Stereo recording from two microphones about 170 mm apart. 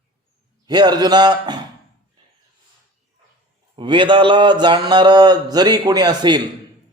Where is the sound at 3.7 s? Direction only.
30° right (ahead or behind).